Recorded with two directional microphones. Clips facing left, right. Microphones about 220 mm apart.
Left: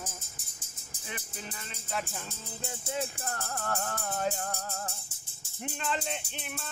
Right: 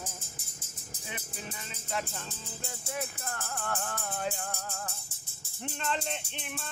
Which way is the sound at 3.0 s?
35° left (ahead or behind).